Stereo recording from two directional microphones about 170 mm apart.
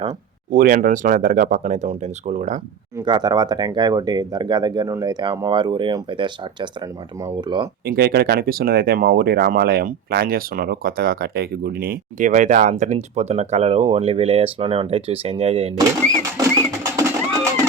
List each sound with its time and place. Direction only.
0.5 s speech: 55° right (ahead or behind)
3.0 s speech: 25° right (ahead or behind)
7.9 s speech: 70° right (ahead or behind); by 15.7 s 35° right (ahead or behind)
16.4 s music: 15° right (ahead or behind)